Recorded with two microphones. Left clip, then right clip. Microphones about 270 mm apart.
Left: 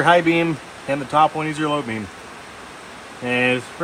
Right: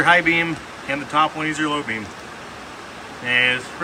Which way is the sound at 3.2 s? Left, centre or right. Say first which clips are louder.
Right 2 dB; centre.